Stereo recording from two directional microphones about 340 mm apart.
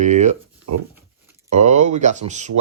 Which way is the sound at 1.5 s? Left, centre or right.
Centre.